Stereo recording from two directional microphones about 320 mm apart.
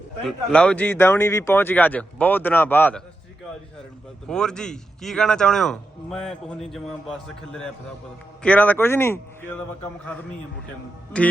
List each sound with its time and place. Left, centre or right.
0.3 s a man's voice: centre
4.3 s a man's voice: centre